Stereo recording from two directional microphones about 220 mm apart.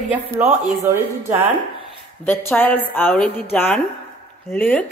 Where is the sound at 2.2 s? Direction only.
10° left (ahead or behind).